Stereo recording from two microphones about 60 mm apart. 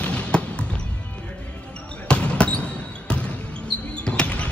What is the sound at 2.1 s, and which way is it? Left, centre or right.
Basketball bounce, centre.